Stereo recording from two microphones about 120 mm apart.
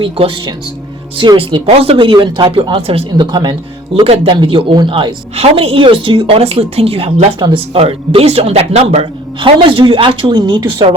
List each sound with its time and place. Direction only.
0.0 s a woman's voice: 45° right (ahead or behind)
1.6 s a woman's voice: 55° right (ahead or behind)
9.4 s a woman's voice: 45° right (ahead or behind)